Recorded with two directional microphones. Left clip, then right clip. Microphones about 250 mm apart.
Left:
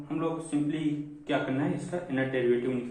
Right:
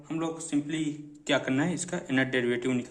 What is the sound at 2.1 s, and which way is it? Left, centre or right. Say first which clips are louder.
Speech: right 3 dB; right.